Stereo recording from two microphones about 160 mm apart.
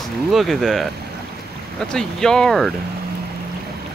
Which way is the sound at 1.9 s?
5° left (ahead or behind).